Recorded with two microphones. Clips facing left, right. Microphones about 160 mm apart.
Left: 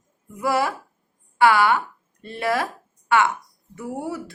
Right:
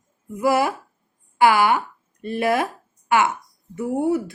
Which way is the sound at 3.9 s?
20° right (ahead or behind).